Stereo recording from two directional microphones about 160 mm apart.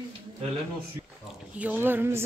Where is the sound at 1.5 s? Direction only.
10° right (ahead or behind).